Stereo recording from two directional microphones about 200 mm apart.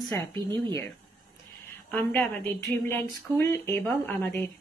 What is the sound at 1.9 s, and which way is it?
A woman's voice, 5° left (ahead or behind).